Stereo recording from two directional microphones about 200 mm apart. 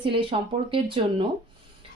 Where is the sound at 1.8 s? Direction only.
25° right (ahead or behind).